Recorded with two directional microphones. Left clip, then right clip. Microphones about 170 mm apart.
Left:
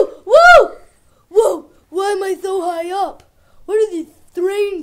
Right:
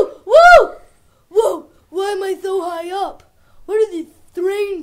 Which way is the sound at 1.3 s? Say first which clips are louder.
Left 2 dB; 40° left (ahead or behind).